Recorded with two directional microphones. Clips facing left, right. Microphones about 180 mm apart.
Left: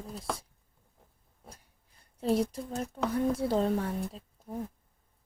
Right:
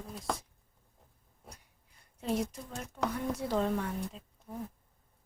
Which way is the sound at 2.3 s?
35° left (ahead or behind).